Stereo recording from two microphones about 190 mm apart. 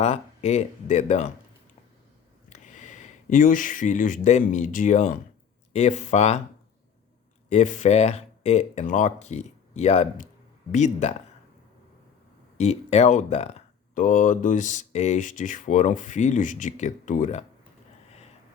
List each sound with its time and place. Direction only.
0.0 s speech: 35° left (ahead or behind)
2.5 s speech: 40° left (ahead or behind)
7.5 s speech: 40° left (ahead or behind)
12.5 s speech: 35° left (ahead or behind)